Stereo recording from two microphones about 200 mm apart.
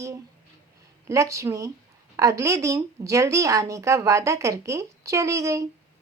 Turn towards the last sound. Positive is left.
turn(degrees=-15)  # may be behind; listen again after turning